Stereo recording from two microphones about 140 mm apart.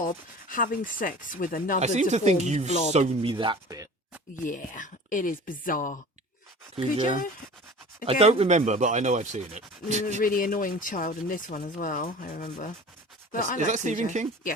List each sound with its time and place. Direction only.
0.4 s speech: 80° left
1.8 s speech: 55° right (ahead or behind); by 3.8 s 30° right (ahead or behind)
4.4 s speech: 70° left (ahead or behind)
6.7 s speech: 40° right (ahead or behind); by 10.2 s 55° right (ahead or behind)
10.2 s speech: 80° left
13.6 s speech: 60° right (ahead or behind)